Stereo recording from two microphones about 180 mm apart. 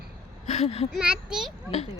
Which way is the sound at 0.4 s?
40° left (ahead or behind).